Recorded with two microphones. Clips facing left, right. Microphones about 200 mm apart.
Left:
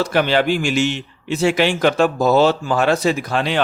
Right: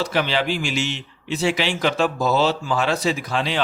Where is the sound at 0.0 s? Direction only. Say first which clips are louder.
Left 5 dB; 55° left (ahead or behind).